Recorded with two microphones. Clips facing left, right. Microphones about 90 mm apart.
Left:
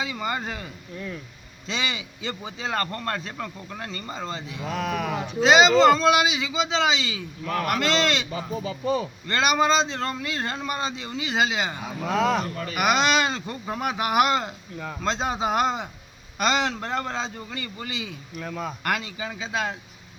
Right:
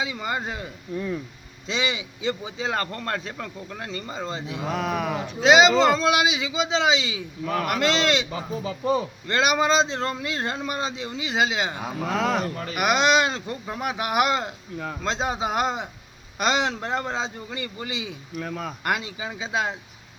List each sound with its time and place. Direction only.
0.0 s speech: 10° right (ahead or behind)
4.8 s speech: 5° right (ahead or behind)
18.3 s speech: 5° right (ahead or behind)